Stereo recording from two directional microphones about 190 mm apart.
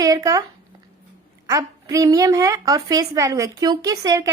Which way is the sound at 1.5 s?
20° right (ahead or behind).